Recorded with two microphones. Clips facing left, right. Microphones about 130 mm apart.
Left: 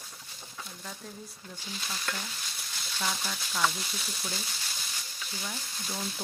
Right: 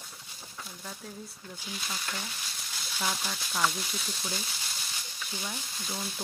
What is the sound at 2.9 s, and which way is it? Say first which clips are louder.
Speech: even; 5° right (ahead or behind).